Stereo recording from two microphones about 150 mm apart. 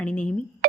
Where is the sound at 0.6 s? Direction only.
80° right.